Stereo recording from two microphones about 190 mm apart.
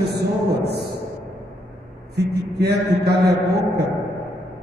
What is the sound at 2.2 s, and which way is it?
A man's voice, 60° right (ahead or behind).